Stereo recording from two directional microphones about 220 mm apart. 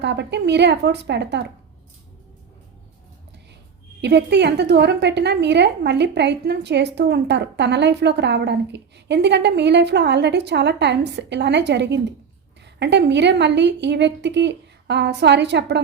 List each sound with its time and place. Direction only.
0.0 s a woman's voice: 50° right (ahead or behind)
4.0 s a woman's voice: 50° right (ahead or behind)